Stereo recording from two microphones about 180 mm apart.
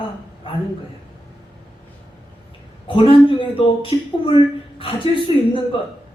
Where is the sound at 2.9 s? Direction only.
30° left (ahead or behind).